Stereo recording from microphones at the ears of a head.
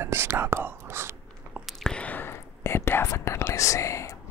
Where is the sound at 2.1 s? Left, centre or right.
Left.